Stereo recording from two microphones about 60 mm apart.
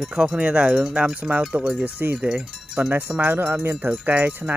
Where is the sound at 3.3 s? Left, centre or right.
Right.